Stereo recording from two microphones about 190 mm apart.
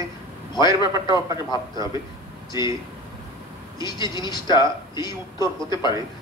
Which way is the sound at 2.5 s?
15° right (ahead or behind).